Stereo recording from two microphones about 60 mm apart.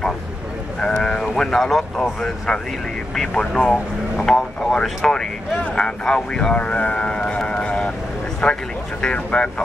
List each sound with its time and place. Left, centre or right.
0.7 s speech: centre